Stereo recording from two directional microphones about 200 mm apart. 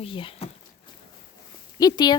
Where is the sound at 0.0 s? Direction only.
25° left (ahead or behind).